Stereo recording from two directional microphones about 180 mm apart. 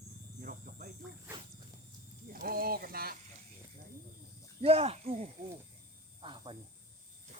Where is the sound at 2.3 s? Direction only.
55° right (ahead or behind).